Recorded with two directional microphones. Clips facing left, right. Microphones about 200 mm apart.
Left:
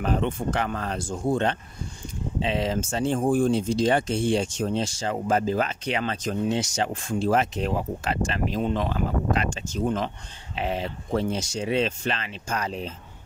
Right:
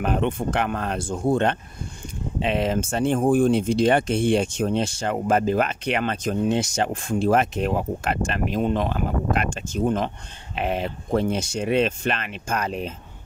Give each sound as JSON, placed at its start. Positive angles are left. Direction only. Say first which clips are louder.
{"t": 0.0, "sound": "speech", "louder": "right 2 dB", "side_deg": -60}